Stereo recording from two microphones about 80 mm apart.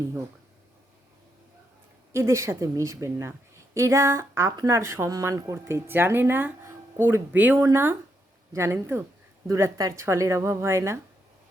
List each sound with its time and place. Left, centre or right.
2.1 s speech: right